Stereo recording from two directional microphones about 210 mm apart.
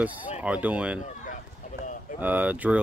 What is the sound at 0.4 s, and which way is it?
Speech, 5° right (ahead or behind).